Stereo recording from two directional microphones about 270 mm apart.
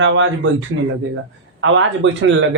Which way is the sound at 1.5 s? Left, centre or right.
Right.